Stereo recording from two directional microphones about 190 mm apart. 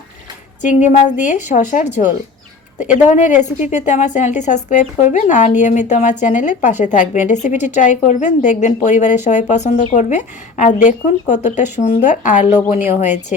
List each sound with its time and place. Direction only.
0.6 s a woman's voice: 40° left (ahead or behind)